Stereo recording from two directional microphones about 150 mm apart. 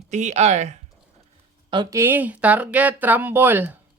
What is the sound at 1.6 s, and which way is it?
Speech, 30° right (ahead or behind).